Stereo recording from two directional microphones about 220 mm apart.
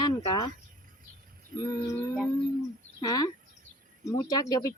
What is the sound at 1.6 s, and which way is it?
Speech, 15° left (ahead or behind).